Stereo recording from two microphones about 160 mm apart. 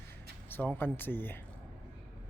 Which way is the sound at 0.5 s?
10° left (ahead or behind).